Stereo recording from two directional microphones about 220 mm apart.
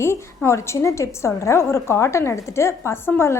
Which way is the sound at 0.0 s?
10° left (ahead or behind).